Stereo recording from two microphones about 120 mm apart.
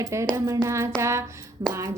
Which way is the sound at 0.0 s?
25° right (ahead or behind).